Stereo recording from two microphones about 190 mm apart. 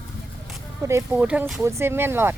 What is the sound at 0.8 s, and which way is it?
Speech, 10° right (ahead or behind).